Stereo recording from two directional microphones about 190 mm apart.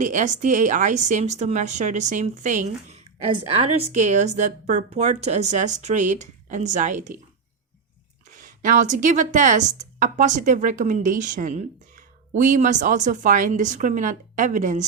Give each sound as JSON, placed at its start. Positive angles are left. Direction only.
{"t": 0.0, "sound": "speech", "side_deg": -40}
{"t": 8.3, "sound": "speech", "side_deg": -40}